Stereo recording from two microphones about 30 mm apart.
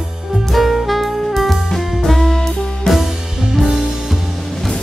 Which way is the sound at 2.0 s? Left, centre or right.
Centre.